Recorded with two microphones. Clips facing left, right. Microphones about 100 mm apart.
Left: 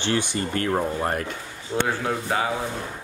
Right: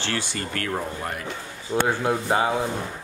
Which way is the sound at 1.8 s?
20° right (ahead or behind).